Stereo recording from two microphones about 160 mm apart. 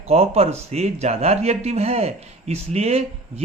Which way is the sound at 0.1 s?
40° right (ahead or behind).